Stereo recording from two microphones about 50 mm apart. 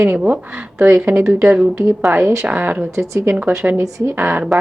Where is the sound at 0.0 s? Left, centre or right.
Right.